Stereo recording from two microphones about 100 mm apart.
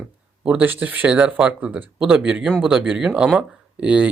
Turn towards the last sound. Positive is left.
turn(degrees=-15)  # may be behind; listen again after turning